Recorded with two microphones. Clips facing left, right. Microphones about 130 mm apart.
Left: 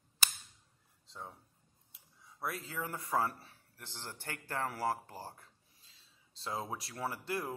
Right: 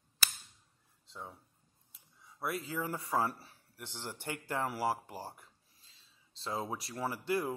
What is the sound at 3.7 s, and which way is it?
Speech, 15° right (ahead or behind).